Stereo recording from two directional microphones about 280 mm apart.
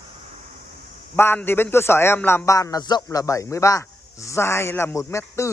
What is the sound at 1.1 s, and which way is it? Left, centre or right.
A man's voice, centre.